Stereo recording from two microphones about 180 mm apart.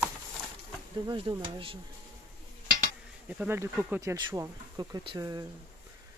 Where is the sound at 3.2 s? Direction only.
10° right (ahead or behind).